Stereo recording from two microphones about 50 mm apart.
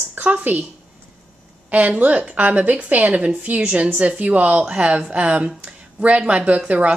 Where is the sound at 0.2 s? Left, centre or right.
Right.